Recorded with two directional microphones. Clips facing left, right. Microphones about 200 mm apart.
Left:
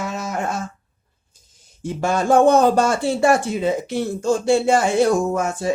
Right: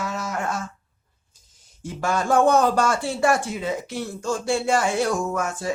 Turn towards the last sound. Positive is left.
turn(degrees=25)  # may be behind; listen again after turning